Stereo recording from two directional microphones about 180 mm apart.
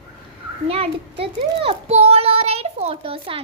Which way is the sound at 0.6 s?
35° right (ahead or behind).